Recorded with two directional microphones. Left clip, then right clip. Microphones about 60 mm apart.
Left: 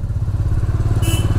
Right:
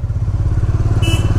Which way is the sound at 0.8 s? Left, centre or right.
Left.